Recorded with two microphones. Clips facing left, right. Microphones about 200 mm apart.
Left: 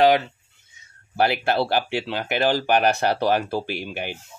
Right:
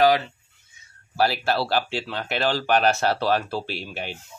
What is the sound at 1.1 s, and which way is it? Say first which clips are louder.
Speech: left 2 dB; 20° left (ahead or behind).